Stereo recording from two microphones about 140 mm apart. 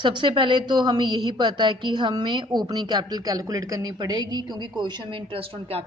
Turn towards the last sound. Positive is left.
turn(degrees=-40)  # may be behind; listen again after turning